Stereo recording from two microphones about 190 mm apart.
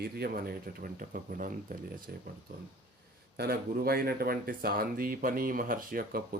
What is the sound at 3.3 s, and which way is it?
Speech, 55° right (ahead or behind).